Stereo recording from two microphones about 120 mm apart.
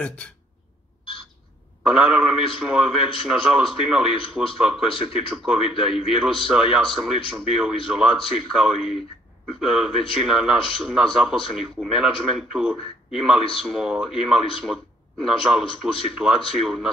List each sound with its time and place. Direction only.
0.0 s speech: 10° left (ahead or behind)
1.8 s speech: 5° right (ahead or behind)